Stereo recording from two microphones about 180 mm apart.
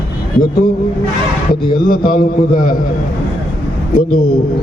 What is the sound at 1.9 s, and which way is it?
Speech, 55° left (ahead or behind).